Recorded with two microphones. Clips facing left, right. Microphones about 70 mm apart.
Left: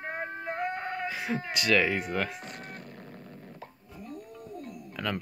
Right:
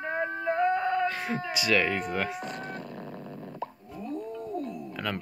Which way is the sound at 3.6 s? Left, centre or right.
Right.